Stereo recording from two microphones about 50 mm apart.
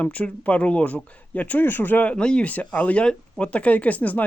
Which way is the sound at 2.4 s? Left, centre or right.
Left.